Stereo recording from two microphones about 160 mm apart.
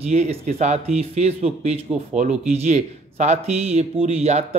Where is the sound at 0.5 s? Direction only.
45° right (ahead or behind).